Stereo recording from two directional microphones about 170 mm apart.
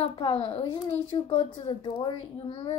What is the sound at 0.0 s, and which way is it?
Speech, 30° left (ahead or behind).